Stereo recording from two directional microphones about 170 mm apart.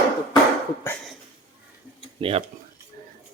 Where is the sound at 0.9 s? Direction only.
15° left (ahead or behind).